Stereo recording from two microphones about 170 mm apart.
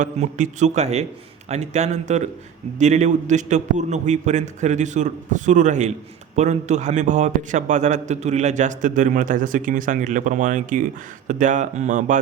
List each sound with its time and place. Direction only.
0.0 s a man's voice: 45° right (ahead or behind)